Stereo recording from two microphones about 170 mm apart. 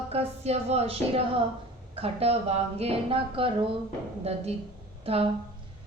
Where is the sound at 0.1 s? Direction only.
35° right (ahead or behind).